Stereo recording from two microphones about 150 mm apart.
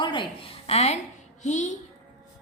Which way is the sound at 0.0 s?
35° left (ahead or behind).